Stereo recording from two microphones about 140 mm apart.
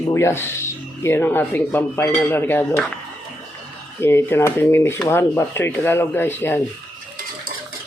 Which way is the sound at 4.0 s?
15° left (ahead or behind).